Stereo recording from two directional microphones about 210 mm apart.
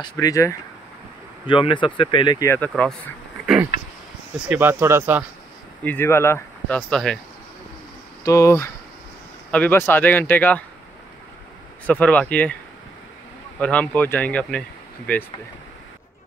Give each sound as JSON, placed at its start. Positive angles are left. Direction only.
{"t": 0.0, "sound": "speech", "side_deg": 15}
{"t": 2.7, "sound": "speech", "side_deg": 0}
{"t": 5.9, "sound": "speech", "side_deg": 10}
{"t": 8.3, "sound": "speech", "side_deg": 15}
{"t": 11.8, "sound": "speech", "side_deg": 5}
{"t": 13.6, "sound": "speech", "side_deg": 5}